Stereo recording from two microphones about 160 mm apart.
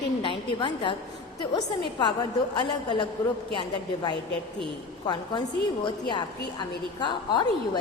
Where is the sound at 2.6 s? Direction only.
30° left (ahead or behind).